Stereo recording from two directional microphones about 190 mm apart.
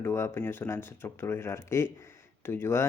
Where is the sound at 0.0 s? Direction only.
15° left (ahead or behind).